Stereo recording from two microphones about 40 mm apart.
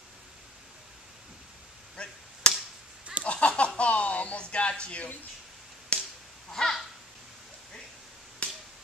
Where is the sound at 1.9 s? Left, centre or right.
Left.